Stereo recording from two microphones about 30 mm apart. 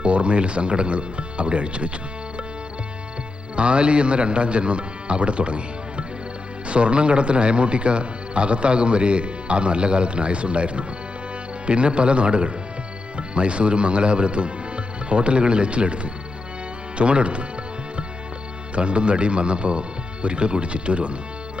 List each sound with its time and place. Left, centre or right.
0.0 s speech: right
3.5 s speech: right
18.7 s speech: right